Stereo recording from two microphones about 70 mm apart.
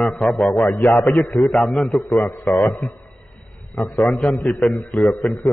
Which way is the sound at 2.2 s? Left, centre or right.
Left.